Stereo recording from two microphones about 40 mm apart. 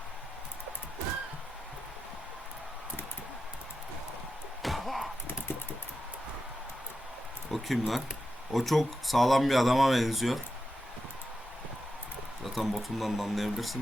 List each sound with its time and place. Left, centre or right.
4.6 s slam: centre
7.5 s speech: centre
12.5 s speech: centre